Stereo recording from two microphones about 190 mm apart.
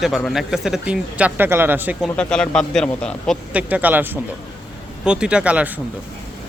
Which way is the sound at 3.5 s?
5° right (ahead or behind).